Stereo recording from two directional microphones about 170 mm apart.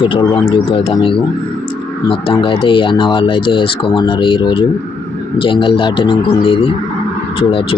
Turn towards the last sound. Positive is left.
turn(degrees=30)  # may be behind; listen again after turning